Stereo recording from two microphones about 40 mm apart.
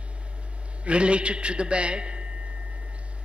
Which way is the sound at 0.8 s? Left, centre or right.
Right.